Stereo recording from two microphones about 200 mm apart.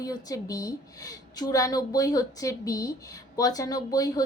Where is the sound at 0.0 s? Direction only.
15° left (ahead or behind).